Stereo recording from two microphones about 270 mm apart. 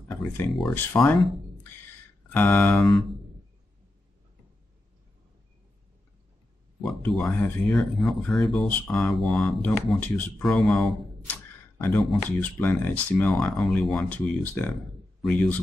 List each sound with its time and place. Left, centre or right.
0.1 s speech: centre
2.3 s speech: centre
6.8 s speech: centre